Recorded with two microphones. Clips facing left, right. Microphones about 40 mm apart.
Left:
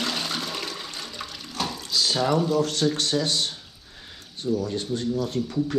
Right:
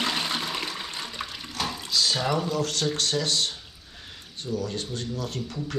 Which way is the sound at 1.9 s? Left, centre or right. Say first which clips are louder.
Even; centre.